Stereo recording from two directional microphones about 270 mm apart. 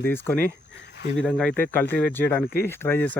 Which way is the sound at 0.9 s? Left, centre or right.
Left.